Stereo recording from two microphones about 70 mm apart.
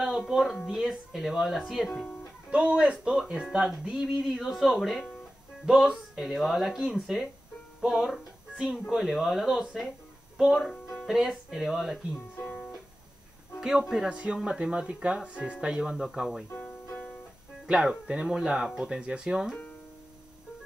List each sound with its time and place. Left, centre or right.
0.3 s speech: centre
2.5 s speech: centre
7.8 s music: centre
8.5 s speech: centre
10.5 s speech: centre
13.6 s speech: centre
17.6 s speech: centre